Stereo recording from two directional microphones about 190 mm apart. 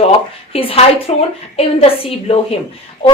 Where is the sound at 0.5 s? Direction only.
30° left (ahead or behind).